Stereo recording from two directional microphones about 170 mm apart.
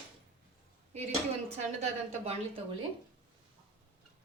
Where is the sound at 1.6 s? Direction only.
40° right (ahead or behind).